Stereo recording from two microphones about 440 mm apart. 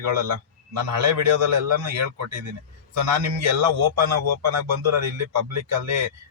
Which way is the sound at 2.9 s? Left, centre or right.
Right.